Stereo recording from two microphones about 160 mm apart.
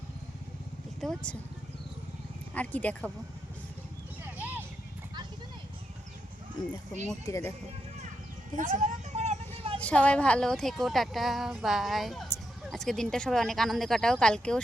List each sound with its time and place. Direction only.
1.0 s speech: 5° left (ahead or behind)
2.6 s speech: 10° left (ahead or behind)
4.4 s music: 10° right (ahead or behind)
7.3 s speech: 20° left (ahead or behind)
8.5 s speech: 45° right (ahead or behind)
9.7 s a woman's voice: 10° left (ahead or behind)